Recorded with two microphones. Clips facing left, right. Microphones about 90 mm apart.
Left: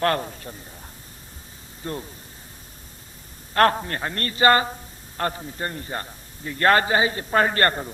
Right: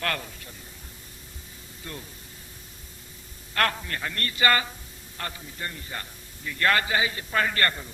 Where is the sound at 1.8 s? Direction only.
35° left (ahead or behind).